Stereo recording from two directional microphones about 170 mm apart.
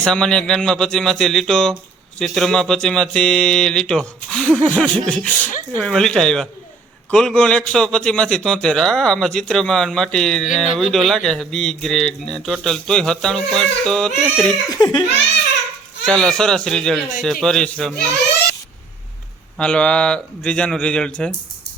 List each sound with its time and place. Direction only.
0.0 s a man's voice: 5° left (ahead or behind)
4.8 s a sound: 5° left (ahead or behind)
5.8 s a man's voice: 5° left (ahead or behind)
14.7 s laughter: 25° left (ahead or behind)
16.0 s a man's voice: 5° left (ahead or behind)
19.5 s a man's voice: 5° left (ahead or behind)